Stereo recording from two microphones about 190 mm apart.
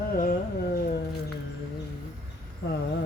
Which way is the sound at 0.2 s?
45° left (ahead or behind).